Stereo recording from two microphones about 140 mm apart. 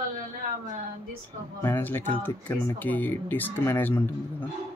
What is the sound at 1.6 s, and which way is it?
Speech, 15° left (ahead or behind).